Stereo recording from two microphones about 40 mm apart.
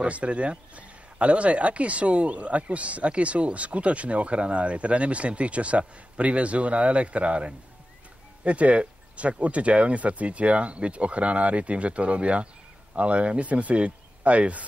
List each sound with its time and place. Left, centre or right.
0.0 s speech: right